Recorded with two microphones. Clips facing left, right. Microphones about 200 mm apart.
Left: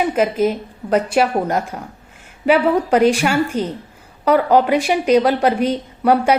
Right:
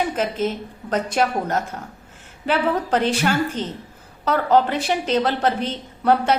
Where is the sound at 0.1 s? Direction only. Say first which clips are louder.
Left 6 dB; 10° left (ahead or behind).